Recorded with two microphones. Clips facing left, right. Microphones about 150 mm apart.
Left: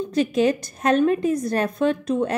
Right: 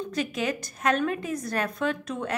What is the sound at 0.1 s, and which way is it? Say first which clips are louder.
A woman's voice: left 11 dB; 30° left (ahead or behind).